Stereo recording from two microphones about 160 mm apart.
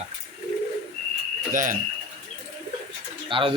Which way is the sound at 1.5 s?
55° right (ahead or behind).